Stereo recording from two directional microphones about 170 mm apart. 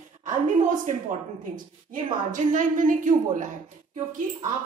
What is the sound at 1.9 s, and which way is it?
A woman's voice, 50° right (ahead or behind).